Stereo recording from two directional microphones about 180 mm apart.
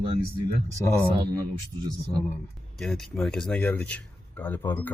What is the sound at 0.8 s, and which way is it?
Speech, 15° left (ahead or behind).